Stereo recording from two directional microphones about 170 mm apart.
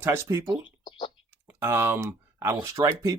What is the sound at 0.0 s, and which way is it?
Speech, 15° right (ahead or behind).